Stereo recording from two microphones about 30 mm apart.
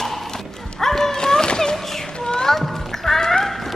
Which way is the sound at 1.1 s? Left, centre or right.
Left.